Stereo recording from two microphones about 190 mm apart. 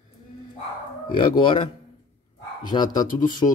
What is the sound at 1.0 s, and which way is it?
Speech, 25° left (ahead or behind).